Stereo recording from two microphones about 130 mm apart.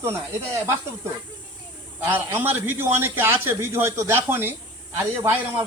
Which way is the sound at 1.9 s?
15° right (ahead or behind).